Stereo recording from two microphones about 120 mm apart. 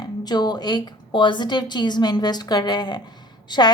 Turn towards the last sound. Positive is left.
turn(degrees=35)  # may be behind; listen again after turning